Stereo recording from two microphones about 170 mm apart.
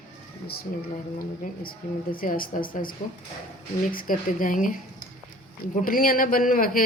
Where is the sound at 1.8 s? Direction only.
55° left (ahead or behind).